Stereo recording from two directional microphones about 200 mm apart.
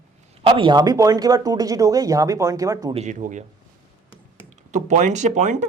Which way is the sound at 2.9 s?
35° right (ahead or behind).